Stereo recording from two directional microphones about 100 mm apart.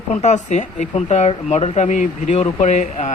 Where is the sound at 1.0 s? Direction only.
90° left.